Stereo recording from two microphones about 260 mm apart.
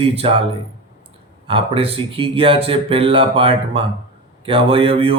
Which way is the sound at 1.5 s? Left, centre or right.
Right.